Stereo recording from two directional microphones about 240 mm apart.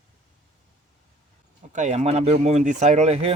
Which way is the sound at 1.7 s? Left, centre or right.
Right.